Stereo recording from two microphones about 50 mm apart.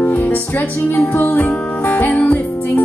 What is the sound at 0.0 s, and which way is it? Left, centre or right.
Speech, left.